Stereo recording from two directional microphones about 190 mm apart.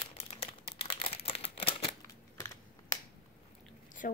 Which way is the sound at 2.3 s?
15° left (ahead or behind).